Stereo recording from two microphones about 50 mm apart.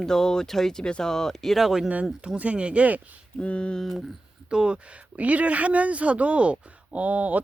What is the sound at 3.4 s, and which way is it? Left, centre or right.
Speech, left.